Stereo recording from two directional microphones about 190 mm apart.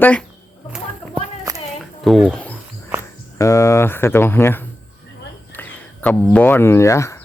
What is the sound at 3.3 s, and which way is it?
Speech, 15° left (ahead or behind).